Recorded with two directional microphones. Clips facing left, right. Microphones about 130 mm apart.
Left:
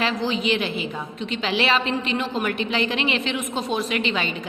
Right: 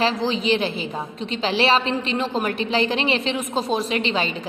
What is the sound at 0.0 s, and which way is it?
A woman's voice, 35° right (ahead or behind).